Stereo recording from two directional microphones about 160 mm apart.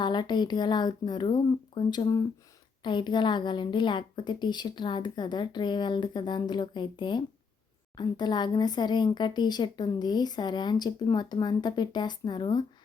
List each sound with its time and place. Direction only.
0.0 s speech: 30° left (ahead or behind)